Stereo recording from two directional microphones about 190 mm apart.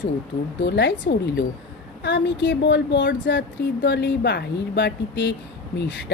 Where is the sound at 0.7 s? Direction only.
65° left (ahead or behind).